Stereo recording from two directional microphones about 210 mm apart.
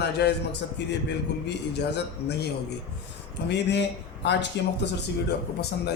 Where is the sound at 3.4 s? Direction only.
55° left (ahead or behind).